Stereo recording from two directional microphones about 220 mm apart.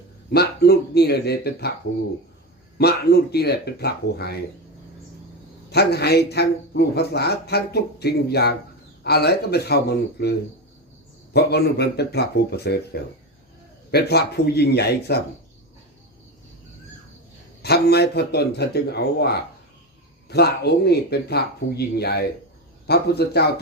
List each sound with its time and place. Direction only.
0.3 s a man's voice: 45° left (ahead or behind)
2.7 s a man's voice: 45° left (ahead or behind)
5.7 s a man's voice: 50° left (ahead or behind)
11.3 s a man's voice: 50° left (ahead or behind)
17.6 s a man's voice: 45° left (ahead or behind)